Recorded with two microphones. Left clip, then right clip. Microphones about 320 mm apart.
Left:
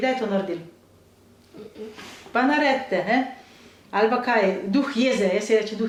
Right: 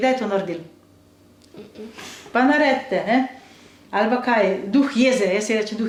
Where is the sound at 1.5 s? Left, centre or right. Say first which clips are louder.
Even; right.